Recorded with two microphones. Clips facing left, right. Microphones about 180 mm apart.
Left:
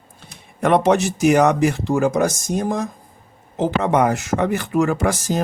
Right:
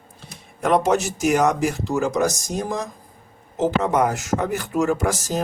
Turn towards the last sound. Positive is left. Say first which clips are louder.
# left 2 dB
turn(degrees=60)  # may be behind; listen again after turning